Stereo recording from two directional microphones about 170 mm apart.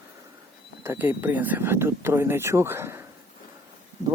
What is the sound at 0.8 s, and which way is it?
Speech, 15° right (ahead or behind).